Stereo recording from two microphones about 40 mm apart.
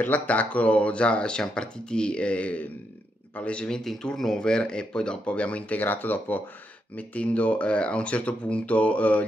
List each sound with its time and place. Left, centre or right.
0.3 s speech: left
5.2 s speech: left
5.8 s speech: left
7.0 s speech: left